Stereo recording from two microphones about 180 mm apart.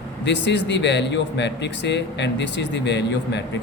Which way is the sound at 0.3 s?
75° left (ahead or behind).